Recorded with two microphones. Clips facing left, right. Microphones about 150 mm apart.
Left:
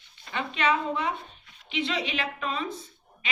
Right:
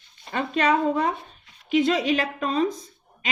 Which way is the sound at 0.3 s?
40° right (ahead or behind).